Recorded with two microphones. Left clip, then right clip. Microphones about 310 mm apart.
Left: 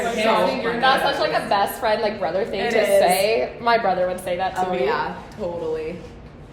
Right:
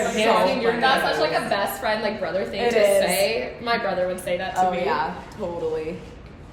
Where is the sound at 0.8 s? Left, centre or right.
Centre.